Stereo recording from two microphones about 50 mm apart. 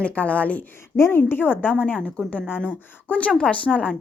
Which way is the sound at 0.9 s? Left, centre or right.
Left.